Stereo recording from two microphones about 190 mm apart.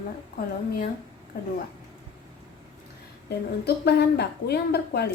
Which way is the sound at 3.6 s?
55° left (ahead or behind).